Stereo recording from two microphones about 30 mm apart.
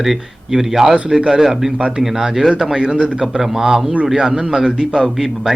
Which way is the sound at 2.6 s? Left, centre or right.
Right.